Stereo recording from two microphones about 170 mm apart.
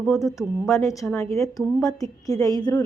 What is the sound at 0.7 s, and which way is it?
A woman's voice, 20° left (ahead or behind).